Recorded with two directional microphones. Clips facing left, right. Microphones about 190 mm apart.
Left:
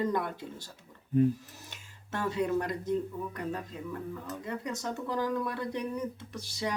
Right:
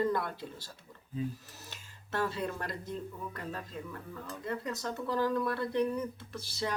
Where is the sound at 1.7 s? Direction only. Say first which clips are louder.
Right 1 dB; 15° left (ahead or behind).